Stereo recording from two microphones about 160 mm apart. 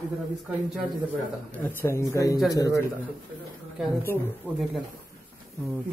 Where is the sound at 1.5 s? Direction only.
15° left (ahead or behind).